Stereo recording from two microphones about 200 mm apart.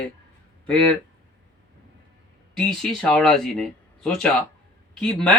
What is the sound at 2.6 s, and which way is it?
Speech, 5° left (ahead or behind).